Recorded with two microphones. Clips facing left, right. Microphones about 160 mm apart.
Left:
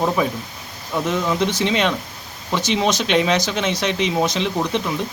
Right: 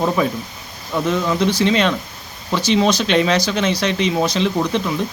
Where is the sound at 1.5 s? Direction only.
20° left (ahead or behind).